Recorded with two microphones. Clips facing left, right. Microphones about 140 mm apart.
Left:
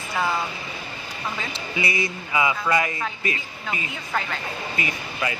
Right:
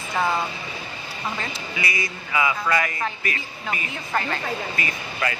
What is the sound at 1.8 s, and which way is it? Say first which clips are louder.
Speech: left 4 dB; 25° left (ahead or behind).